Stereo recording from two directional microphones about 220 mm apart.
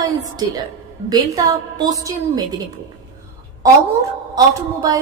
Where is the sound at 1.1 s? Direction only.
15° right (ahead or behind).